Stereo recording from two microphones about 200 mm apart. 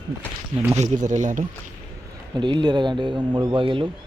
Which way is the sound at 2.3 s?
20° right (ahead or behind).